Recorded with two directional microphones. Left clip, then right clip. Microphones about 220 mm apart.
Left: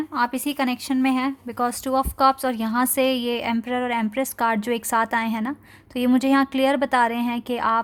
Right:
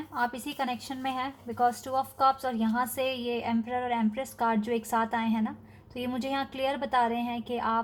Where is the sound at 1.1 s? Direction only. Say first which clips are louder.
Left 6 dB; 90° left.